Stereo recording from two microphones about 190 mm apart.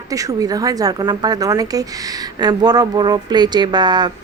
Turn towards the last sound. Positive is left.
turn(degrees=-20)  # may be behind; listen again after turning